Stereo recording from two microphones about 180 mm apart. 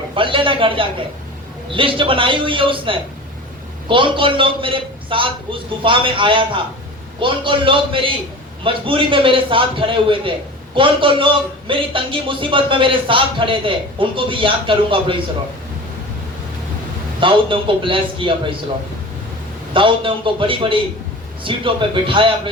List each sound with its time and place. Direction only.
0.2 s a man's voice: 30° right (ahead or behind)
17.2 s a man's voice: 30° right (ahead or behind)
19.7 s a man's voice: 30° right (ahead or behind)